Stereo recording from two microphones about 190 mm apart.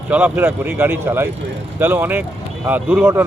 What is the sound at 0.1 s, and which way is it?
Speech, 10° right (ahead or behind).